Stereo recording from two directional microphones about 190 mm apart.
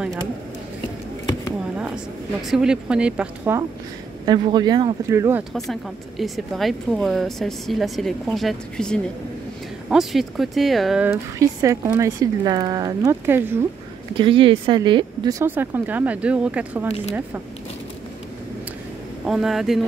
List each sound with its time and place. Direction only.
2.4 s speech: 5° right (ahead or behind)
4.3 s speech: 20° right (ahead or behind)
5.7 s speech: centre (ahead or behind)
14.1 s speech: 25° right (ahead or behind); by 16.8 s 5° right (ahead or behind)
19.2 s speech: centre (ahead or behind)